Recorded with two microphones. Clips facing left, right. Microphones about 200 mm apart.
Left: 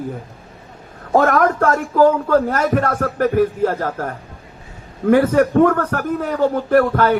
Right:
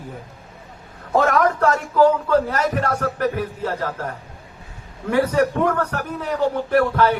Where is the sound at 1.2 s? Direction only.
50° left (ahead or behind).